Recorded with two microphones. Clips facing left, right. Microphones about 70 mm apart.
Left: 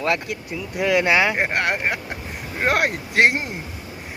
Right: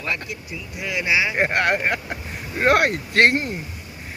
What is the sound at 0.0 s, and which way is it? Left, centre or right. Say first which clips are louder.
Speech: left 5 dB; left.